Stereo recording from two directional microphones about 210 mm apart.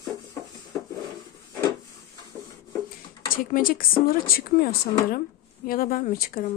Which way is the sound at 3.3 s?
40° left (ahead or behind).